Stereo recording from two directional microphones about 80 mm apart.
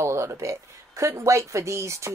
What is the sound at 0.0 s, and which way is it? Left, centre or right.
Speech, right.